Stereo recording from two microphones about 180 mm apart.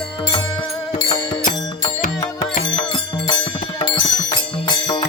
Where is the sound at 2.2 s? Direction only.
25° left (ahead or behind).